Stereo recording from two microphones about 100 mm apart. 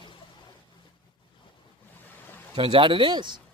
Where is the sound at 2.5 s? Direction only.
60° right (ahead or behind).